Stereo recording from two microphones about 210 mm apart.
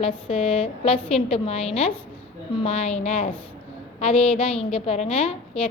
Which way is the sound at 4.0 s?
30° left (ahead or behind).